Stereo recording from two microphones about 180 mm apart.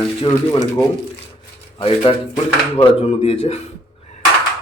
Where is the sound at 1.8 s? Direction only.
30° left (ahead or behind).